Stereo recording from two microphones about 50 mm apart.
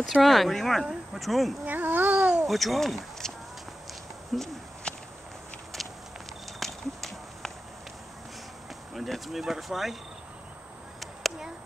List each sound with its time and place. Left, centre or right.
0.1 s speech: centre
1.7 s speech: right
2.4 s speech: centre
4.3 s speech: centre
4.9 s walk: centre
6.6 s run: centre
8.9 s speech: centre